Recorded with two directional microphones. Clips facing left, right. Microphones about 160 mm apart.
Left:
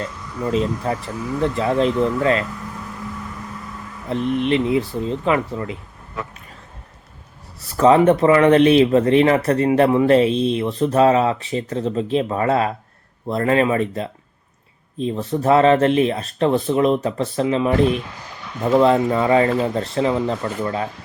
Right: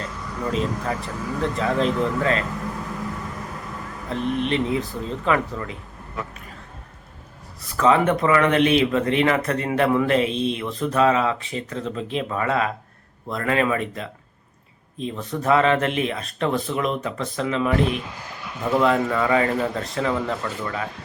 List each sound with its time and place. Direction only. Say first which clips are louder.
0.5 s speech: left 5 dB; 35° left (ahead or behind)
4.4 s speech: left 5 dB; 35° right (ahead or behind)
4.7 s speech: left 5 dB; 30° left (ahead or behind)
7.8 s speech: left 5 dB; 30° left (ahead or behind)